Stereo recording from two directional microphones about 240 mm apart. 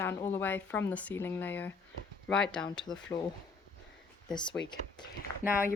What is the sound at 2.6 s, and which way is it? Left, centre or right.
Speech, centre.